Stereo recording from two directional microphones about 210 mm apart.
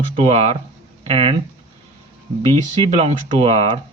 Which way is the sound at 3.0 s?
30° right (ahead or behind).